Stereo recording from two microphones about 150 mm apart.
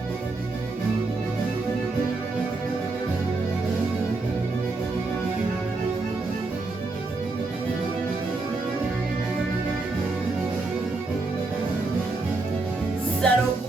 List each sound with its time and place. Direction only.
13.2 s music: 5° left (ahead or behind)